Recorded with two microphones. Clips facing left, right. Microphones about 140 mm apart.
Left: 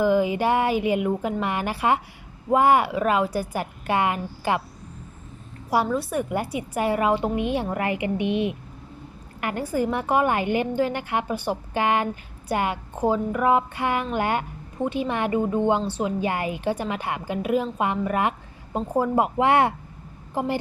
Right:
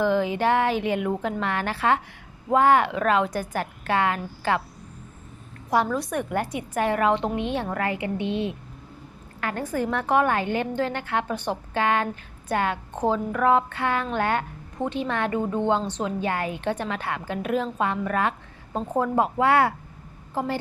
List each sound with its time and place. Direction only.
0.0 s a woman's voice: 10° left (ahead or behind)
5.7 s a woman's voice: 5° left (ahead or behind)